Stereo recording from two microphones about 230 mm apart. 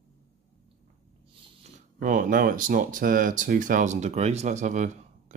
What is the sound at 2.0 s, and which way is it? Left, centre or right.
Speech, right.